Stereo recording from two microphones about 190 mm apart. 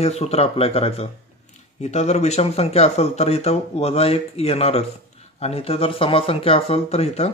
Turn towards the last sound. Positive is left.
turn(degrees=35)  # may be behind; listen again after turning